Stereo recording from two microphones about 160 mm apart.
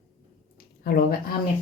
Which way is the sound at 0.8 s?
70° left (ahead or behind).